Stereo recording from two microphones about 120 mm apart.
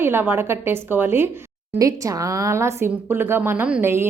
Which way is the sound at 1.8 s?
30° right (ahead or behind).